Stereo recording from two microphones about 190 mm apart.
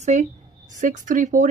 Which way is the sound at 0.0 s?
40° right (ahead or behind).